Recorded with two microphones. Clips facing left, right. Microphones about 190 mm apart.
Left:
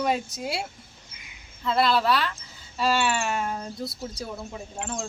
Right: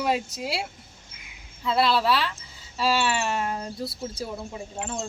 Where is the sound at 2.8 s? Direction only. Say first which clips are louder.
Even; 5° right (ahead or behind).